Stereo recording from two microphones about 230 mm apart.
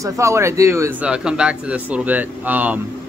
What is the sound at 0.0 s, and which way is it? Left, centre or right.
Speech, centre.